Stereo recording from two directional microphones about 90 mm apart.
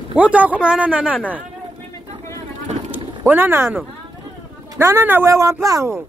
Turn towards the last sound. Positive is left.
turn(degrees=-35)  # may be behind; listen again after turning